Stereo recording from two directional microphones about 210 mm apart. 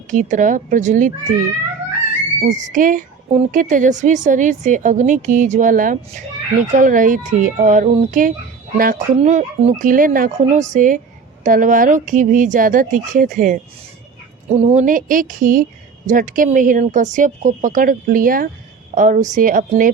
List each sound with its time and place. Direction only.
0.1 s speech: 40° right (ahead or behind)
2.4 s speech: 35° right (ahead or behind)